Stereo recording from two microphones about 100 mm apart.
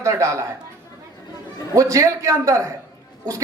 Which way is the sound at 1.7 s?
35° right (ahead or behind).